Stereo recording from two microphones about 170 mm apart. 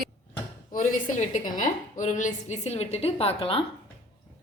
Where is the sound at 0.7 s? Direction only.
50° left (ahead or behind); by 3.6 s 35° left (ahead or behind).